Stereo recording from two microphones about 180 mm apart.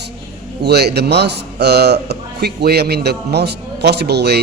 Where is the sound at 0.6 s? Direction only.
65° right (ahead or behind).